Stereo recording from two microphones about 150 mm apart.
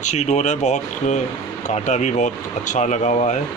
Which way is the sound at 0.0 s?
50° left (ahead or behind).